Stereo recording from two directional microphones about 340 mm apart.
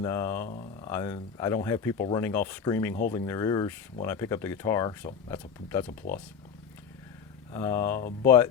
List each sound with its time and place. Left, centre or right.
0.0 s speech: centre
0.4 s speech: centre
0.9 s speech: centre
7.5 s speech: centre